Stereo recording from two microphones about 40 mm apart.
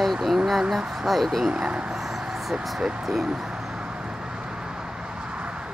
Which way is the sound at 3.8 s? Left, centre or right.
Right.